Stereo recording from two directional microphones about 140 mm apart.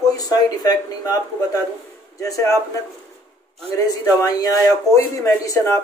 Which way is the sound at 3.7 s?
25° left (ahead or behind).